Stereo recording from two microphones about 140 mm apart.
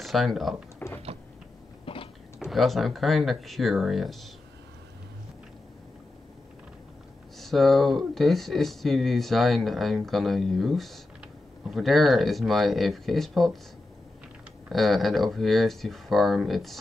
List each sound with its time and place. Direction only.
0.0 s speech: centre (ahead or behind)
0.7 s a sound: 15° left (ahead or behind)
1.9 s a sound: 40° left (ahead or behind)
2.3 s speech: centre (ahead or behind)
7.3 s speech: centre (ahead or behind)
14.7 s speech: centre (ahead or behind)